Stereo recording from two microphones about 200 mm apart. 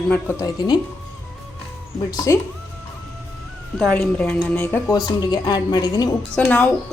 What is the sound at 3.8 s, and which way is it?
A woman's voice, 5° left (ahead or behind).